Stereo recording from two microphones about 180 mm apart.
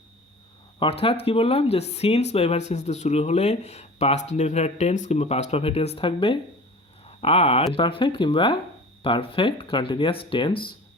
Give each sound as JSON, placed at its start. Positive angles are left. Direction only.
{"t": 0.8, "sound": "speech", "side_deg": 30}